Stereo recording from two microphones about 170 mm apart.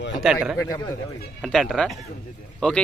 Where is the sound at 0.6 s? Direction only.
20° left (ahead or behind).